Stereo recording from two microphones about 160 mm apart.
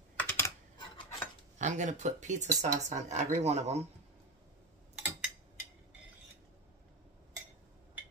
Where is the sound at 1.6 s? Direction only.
50° right (ahead or behind).